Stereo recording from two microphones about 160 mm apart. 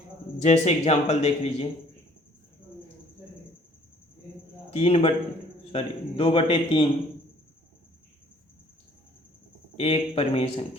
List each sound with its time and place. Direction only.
0.3 s speech: 45° left (ahead or behind)
4.7 s a man's voice: 40° left (ahead or behind)
9.7 s a man's voice: 40° left (ahead or behind)